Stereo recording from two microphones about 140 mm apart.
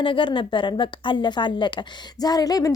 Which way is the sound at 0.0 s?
35° left (ahead or behind).